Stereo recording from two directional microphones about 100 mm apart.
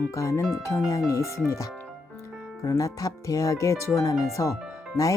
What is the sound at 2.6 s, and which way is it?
Speech, 35° left (ahead or behind).